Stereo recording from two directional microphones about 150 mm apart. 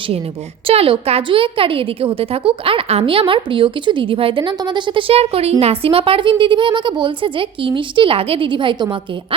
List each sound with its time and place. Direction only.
0.7 s a woman's voice: 40° right (ahead or behind)